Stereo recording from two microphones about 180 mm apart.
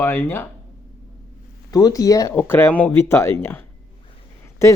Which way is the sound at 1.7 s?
20° left (ahead or behind).